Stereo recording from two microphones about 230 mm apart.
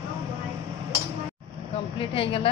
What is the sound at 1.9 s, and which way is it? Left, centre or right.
Speech, left.